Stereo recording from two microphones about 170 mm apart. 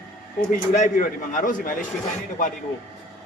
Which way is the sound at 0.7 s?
45° left (ahead or behind).